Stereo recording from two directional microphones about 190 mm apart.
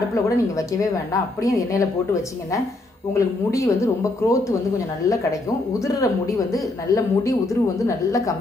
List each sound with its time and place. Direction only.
0.1 s a woman's voice: 15° left (ahead or behind)
3.2 s a woman's voice: 15° left (ahead or behind)